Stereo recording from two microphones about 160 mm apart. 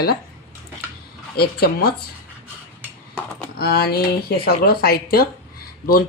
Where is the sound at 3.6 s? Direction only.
75° left (ahead or behind).